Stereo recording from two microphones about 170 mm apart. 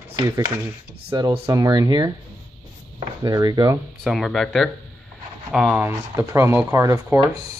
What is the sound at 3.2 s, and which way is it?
Speech, 20° right (ahead or behind).